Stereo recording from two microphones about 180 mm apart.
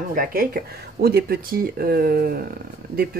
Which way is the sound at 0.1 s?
55° right (ahead or behind).